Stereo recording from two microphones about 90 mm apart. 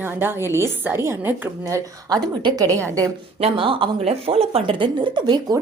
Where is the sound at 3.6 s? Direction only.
75° right (ahead or behind).